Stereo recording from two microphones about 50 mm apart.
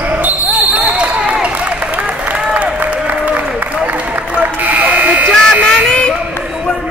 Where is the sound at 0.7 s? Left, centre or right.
Right.